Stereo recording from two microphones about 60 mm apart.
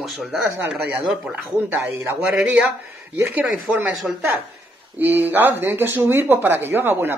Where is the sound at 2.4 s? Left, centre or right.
Right.